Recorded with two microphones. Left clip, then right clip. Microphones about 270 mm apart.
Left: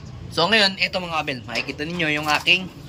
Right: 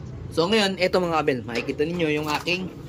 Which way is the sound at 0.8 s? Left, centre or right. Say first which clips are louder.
Right 2 dB; centre.